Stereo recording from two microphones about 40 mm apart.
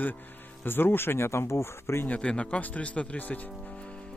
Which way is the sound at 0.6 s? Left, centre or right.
Left.